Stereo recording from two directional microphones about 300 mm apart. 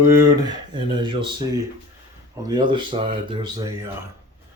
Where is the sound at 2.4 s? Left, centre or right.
Centre.